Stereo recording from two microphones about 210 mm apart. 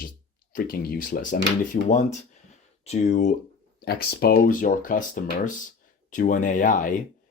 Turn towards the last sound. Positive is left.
turn(degrees=40)  # may be behind; listen again after turning